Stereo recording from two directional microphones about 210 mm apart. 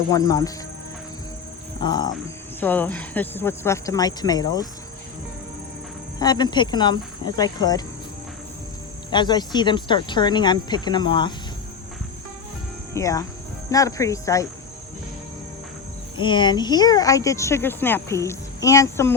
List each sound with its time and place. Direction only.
0.1 s speech: 15° left (ahead or behind)
1.8 s speech: 20° left (ahead or behind)
2.6 s speech: 10° left (ahead or behind)
6.1 s speech: 20° left (ahead or behind)
9.0 s speech: 20° left (ahead or behind)
12.9 s speech: 15° left (ahead or behind)
16.1 s speech: 20° left (ahead or behind)